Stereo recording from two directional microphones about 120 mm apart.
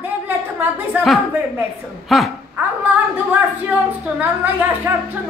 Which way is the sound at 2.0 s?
Centre (ahead or behind).